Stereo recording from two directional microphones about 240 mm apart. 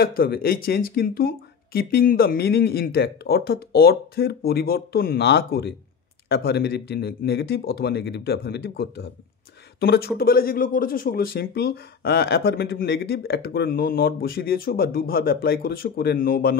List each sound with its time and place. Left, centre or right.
0.0 s speech: left